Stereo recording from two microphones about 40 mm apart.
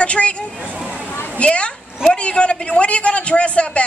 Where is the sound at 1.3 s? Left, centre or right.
Left.